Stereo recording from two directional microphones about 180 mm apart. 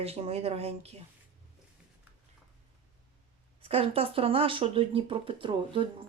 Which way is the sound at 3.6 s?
30° right (ahead or behind).